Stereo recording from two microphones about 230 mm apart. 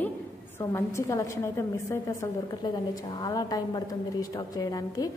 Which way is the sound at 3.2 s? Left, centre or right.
Centre.